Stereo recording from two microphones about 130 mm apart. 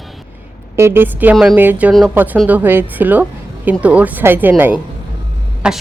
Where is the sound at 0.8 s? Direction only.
20° right (ahead or behind).